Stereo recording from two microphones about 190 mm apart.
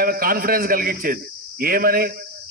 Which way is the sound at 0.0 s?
50° right (ahead or behind).